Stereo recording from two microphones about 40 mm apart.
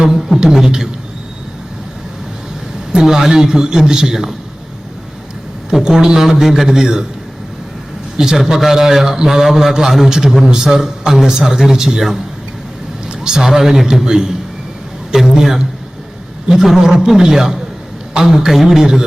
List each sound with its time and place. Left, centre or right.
0.3 s a man's voice: centre
2.9 s a man's voice: centre
5.8 s a man's voice: centre
8.1 s speech: centre
8.4 s a man's voice: centre